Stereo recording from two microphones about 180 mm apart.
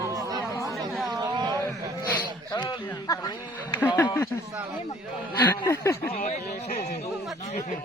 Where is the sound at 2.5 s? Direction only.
20° left (ahead or behind).